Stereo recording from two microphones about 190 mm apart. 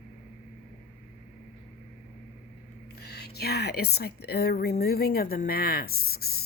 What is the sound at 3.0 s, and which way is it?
A woman's voice, 55° left (ahead or behind).